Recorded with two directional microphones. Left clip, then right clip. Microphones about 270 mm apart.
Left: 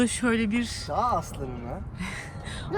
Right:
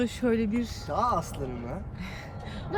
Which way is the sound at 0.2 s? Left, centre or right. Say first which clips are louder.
Right 1 dB; right.